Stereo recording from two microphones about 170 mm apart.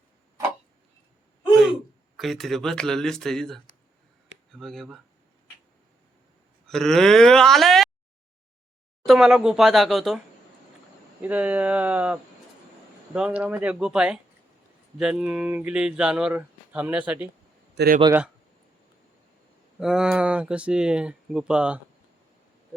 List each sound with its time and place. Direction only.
2.1 s speech: centre (ahead or behind)
6.7 s speech: centre (ahead or behind)
9.0 s speech: 5° right (ahead or behind)
11.2 s speech: 10° right (ahead or behind)
17.7 s speech: 60° right (ahead or behind)
19.8 s speech: 5° right (ahead or behind)